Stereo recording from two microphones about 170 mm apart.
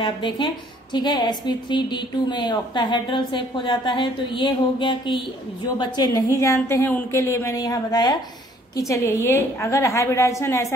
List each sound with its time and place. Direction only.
0.0 s a woman's voice: 30° left (ahead or behind)